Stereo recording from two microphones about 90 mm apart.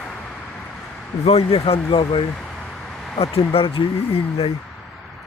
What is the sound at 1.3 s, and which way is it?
Speech, 90° left.